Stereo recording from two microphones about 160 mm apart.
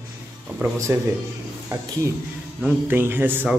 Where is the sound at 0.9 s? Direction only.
15° right (ahead or behind).